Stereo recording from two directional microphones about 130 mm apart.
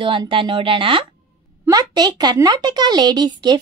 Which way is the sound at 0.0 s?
40° right (ahead or behind).